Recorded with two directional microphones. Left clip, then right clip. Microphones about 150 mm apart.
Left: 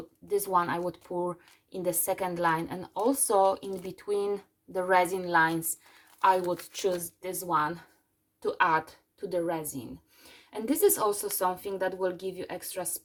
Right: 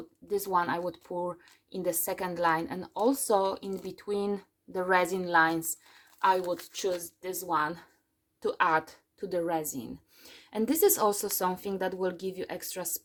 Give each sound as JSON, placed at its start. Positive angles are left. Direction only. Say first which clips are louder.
{"t": 0.3, "sound": "a woman's voice", "louder": "left 1 dB", "side_deg": -25}